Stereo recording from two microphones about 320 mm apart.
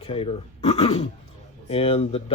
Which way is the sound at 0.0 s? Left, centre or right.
Centre.